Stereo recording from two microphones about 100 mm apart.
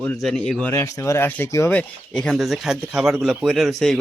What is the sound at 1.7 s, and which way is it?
Speech, 10° left (ahead or behind).